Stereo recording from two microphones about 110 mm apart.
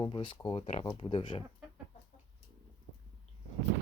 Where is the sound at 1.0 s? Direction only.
50° left (ahead or behind).